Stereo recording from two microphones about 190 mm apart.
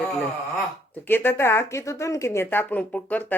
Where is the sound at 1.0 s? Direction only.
10° left (ahead or behind).